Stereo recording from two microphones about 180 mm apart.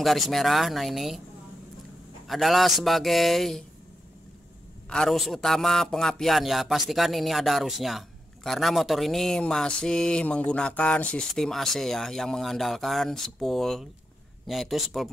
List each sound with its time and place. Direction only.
0.0 s speech: centre (ahead or behind)
2.2 s speech: centre (ahead or behind)
4.8 s speech: 5° left (ahead or behind)